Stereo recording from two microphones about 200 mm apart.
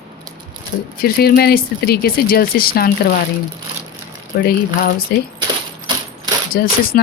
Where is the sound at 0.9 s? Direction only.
50° left (ahead or behind).